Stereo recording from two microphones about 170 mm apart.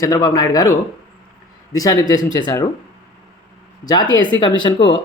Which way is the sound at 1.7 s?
20° left (ahead or behind).